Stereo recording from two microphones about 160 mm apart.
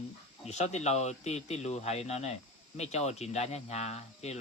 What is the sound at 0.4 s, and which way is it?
Speech, 45° left (ahead or behind).